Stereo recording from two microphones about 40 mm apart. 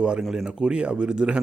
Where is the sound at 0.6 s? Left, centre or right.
Right.